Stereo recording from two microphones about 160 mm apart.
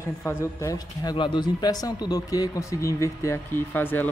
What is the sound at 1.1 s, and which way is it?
Speech, 30° left (ahead or behind).